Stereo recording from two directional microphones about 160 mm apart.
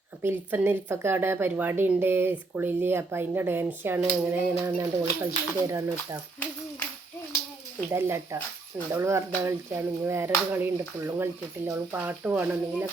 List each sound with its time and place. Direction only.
0.2 s speech: 15° right (ahead or behind)
7.9 s speech: 15° right (ahead or behind)